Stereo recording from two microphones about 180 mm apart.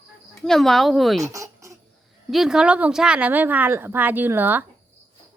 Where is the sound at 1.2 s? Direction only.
15° right (ahead or behind).